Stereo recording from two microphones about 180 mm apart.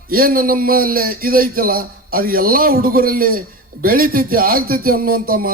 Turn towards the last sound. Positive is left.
turn(degrees=-55)  # may be behind; listen again after turning